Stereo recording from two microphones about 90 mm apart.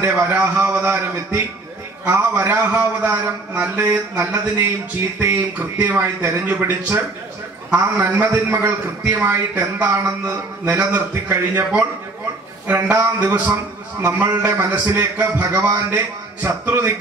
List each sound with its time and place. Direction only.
0.0 s a man's voice: 20° right (ahead or behind)
12.6 s a man's voice: 20° right (ahead or behind)